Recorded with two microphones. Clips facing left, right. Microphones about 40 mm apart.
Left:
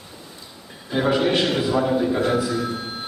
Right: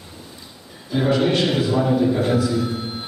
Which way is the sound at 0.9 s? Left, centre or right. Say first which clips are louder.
Right 1 dB; centre.